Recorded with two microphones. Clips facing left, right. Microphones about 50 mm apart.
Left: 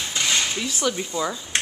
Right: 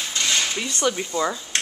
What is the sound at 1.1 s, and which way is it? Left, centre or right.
Speech, centre.